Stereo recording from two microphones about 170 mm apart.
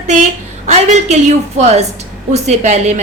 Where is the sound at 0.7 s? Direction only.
40° right (ahead or behind).